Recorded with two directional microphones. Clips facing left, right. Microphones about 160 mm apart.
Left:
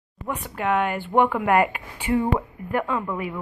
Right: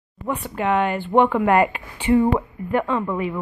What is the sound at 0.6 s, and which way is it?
Speech, 5° left (ahead or behind).